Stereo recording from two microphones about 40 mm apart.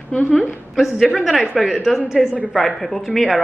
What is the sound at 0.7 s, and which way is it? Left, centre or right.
A woman's voice, centre.